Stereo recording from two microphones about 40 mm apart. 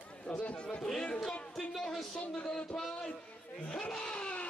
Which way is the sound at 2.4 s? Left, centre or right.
Left.